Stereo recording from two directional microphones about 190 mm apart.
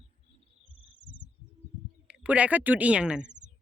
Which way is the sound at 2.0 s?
5° right (ahead or behind).